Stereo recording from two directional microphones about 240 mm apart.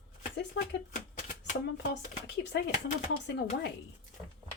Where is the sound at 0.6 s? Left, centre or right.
Left.